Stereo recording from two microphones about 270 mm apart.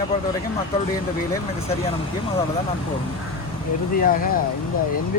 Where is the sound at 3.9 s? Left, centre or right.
Left.